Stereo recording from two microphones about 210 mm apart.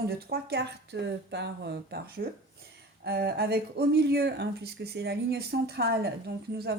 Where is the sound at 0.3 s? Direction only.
50° right (ahead or behind).